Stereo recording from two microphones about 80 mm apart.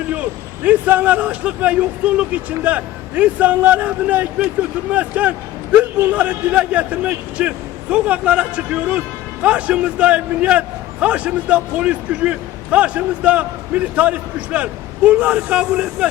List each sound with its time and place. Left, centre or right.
0.1 s a man's voice: centre